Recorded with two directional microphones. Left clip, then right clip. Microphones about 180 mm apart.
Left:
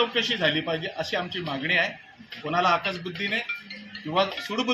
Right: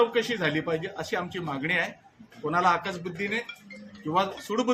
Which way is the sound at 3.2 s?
Centre (ahead or behind).